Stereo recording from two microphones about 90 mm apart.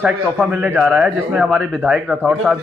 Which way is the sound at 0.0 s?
15° right (ahead or behind).